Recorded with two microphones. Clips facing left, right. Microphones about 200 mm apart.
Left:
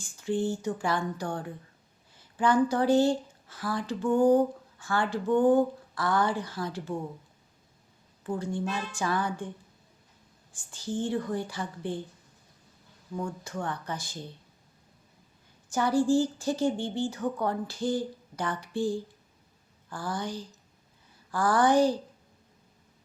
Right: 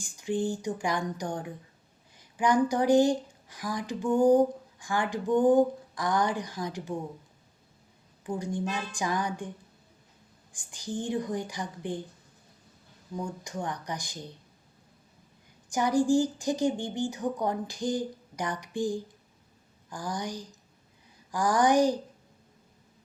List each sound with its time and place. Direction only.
0.0 s a woman's voice: 15° right (ahead or behind)
8.2 s a woman's voice: 15° right (ahead or behind)
10.5 s a woman's voice: 15° right (ahead or behind)
13.1 s a woman's voice: 15° right (ahead or behind)
15.7 s a woman's voice: 15° right (ahead or behind)